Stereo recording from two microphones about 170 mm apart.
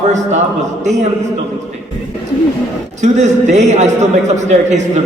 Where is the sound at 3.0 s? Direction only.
45° right (ahead or behind).